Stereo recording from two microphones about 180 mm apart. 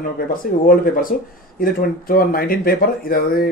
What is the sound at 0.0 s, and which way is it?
Speech, 50° left (ahead or behind).